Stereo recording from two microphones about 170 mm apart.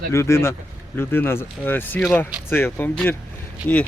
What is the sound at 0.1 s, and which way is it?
Speech, 15° left (ahead or behind).